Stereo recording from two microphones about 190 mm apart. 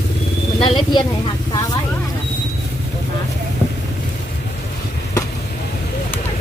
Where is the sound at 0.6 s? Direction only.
25° left (ahead or behind).